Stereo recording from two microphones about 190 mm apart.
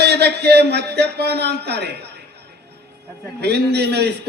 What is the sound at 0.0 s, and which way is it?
Speech, 60° right (ahead or behind).